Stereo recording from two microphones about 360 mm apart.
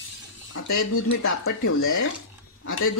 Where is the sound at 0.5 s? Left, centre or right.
Left.